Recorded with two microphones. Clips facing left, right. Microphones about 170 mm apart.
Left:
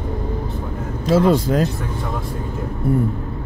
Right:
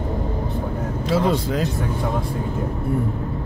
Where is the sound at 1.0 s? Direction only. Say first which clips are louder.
Left 5 dB; 45° left (ahead or behind).